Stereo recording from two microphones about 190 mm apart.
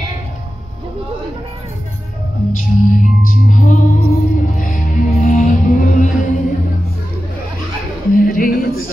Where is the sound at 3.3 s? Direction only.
45° left (ahead or behind).